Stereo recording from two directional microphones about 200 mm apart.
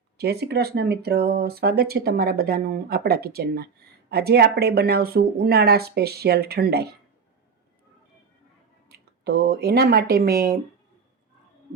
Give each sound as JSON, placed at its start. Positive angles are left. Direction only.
{"t": 0.2, "sound": "speech", "side_deg": -55}
{"t": 8.9, "sound": "speech", "side_deg": -50}